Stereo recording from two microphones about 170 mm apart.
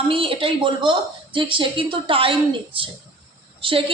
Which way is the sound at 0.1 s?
30° right (ahead or behind).